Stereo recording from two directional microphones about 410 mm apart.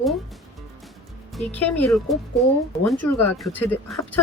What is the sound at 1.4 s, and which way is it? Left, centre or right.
Speech, centre.